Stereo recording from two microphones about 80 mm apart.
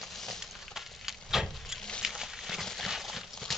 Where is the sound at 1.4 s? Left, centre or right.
Centre.